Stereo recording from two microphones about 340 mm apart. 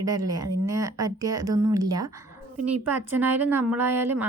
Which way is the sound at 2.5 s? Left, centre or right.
Right.